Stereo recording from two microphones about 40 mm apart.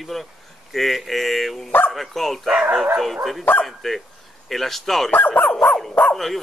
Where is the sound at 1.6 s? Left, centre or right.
Left.